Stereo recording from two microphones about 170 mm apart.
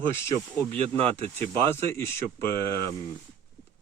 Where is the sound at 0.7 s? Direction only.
35° right (ahead or behind).